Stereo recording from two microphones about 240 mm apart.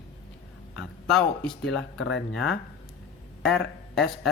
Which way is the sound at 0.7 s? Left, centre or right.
Centre.